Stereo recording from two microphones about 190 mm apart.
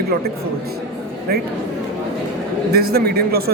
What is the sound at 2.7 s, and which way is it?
Speech, 55° right (ahead or behind).